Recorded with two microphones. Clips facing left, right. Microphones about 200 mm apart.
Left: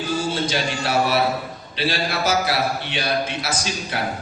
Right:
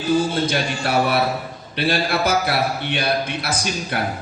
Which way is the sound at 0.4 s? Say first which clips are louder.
Right 2 dB; 55° right (ahead or behind).